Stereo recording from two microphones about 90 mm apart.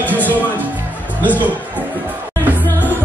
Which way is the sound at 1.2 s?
20° left (ahead or behind).